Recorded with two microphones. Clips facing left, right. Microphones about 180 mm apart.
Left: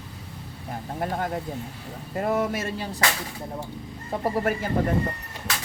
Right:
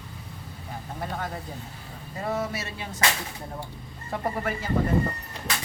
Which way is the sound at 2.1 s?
55° left (ahead or behind).